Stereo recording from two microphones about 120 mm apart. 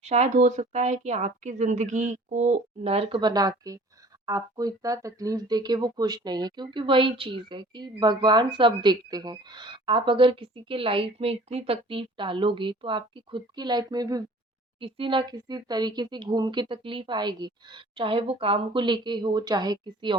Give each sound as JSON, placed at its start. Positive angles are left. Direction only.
{"t": 0.0, "sound": "speech", "side_deg": -70}
{"t": 3.2, "sound": "speech", "side_deg": -35}
{"t": 14.8, "sound": "speech", "side_deg": -45}